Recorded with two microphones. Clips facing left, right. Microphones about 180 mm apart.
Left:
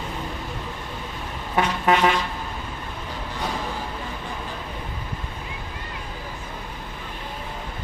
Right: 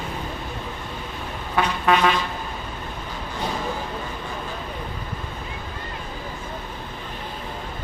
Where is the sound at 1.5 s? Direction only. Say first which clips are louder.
Even; 20° left (ahead or behind).